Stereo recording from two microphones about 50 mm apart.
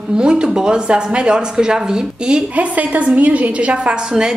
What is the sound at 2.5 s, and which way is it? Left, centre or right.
A woman's voice, right.